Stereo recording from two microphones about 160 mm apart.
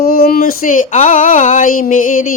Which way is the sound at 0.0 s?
70° left (ahead or behind).